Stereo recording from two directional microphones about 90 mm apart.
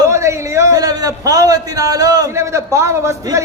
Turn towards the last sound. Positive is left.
turn(degrees=-35)  # may be behind; listen again after turning